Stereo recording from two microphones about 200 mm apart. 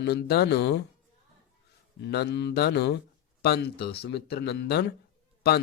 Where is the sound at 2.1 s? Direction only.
55° left (ahead or behind).